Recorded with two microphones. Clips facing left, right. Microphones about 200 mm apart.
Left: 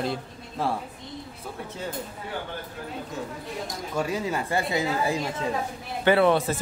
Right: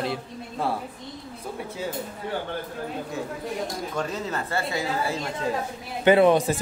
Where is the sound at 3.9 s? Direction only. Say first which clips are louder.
Left 5 dB; 10° left (ahead or behind).